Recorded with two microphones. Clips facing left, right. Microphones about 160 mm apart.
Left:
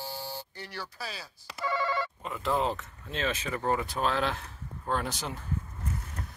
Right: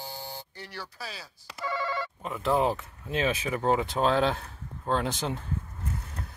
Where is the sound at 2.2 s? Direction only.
Centre (ahead or behind); by 5.4 s 25° right (ahead or behind).